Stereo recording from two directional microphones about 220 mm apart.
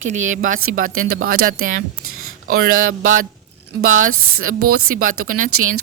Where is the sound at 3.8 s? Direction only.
65° right (ahead or behind).